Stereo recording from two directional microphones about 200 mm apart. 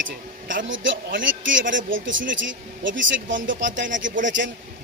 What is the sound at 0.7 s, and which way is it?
Speech, 70° right (ahead or behind).